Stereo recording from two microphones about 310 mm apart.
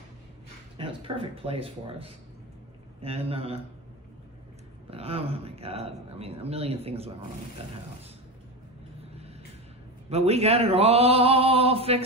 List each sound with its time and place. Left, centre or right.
0.7 s speech: centre
4.9 s speech: centre
10.0 s speech: centre